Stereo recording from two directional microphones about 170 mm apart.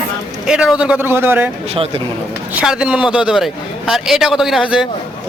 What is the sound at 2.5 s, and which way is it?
A man's voice, 5° right (ahead or behind).